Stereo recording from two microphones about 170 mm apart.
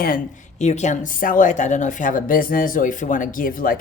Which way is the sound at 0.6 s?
40° left (ahead or behind).